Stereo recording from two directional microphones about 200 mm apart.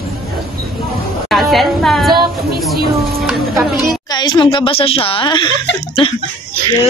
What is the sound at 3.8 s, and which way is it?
A woman's voice, 20° left (ahead or behind).